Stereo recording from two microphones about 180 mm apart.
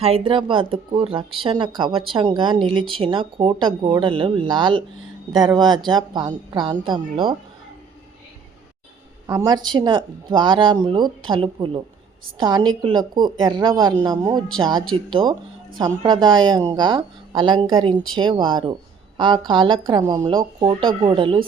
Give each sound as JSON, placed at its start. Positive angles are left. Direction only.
{"t": 0.0, "sound": "a woman's voice", "side_deg": -30}
{"t": 9.2, "sound": "a woman's voice", "side_deg": -20}